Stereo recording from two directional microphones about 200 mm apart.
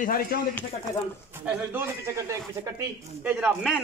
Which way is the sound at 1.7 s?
15° right (ahead or behind).